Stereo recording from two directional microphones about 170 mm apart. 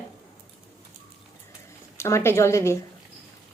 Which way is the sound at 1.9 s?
15° left (ahead or behind).